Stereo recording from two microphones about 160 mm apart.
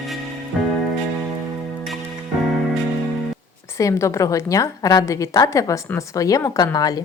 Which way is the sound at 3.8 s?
20° left (ahead or behind).